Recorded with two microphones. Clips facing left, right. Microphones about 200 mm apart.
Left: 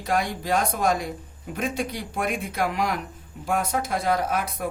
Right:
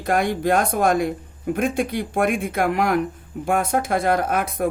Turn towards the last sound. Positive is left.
turn(degrees=-55)  # may be behind; listen again after turning